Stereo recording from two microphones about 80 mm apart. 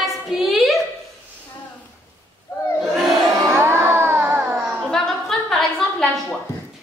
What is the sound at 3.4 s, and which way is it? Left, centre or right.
Music, right.